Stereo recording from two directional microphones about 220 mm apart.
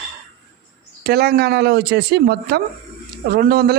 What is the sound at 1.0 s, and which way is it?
Speech, 45° right (ahead or behind).